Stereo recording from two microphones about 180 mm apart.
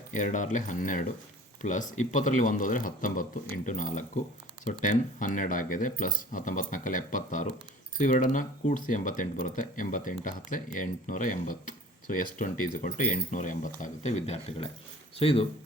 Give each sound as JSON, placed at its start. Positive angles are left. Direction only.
{"t": 0.1, "sound": "speech", "side_deg": 45}